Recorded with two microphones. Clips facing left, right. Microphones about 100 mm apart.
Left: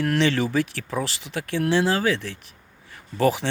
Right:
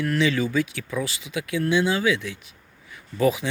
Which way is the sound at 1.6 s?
75° left (ahead or behind).